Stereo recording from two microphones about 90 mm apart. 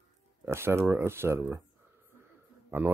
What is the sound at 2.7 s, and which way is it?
Speech, 25° right (ahead or behind).